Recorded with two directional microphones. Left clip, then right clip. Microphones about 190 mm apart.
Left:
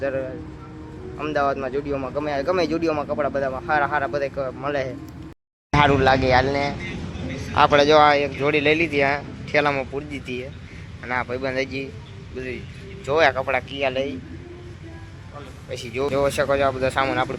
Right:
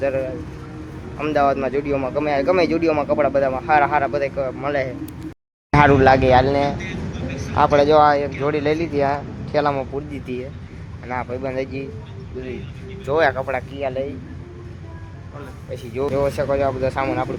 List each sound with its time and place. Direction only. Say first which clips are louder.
0.0 s speech: right 4 dB; centre (ahead or behind)
5.7 s speech: right 4 dB; 25° right (ahead or behind)
7.5 s speech: right 1 dB; centre (ahead or behind)
13.1 s speech: even; 5° right (ahead or behind)
15.7 s speech: right 1 dB; 5° right (ahead or behind)